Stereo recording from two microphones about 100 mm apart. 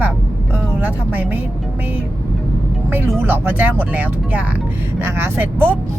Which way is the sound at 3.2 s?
20° right (ahead or behind).